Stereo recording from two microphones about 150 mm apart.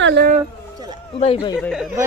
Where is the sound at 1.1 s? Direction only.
40° left (ahead or behind).